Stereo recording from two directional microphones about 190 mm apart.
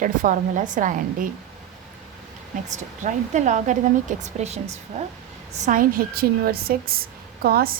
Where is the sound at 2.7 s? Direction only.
40° right (ahead or behind).